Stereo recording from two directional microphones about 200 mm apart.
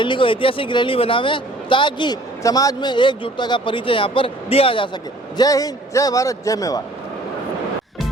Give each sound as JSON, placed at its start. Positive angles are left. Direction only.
{"t": 0.0, "sound": "a man's voice", "side_deg": 25}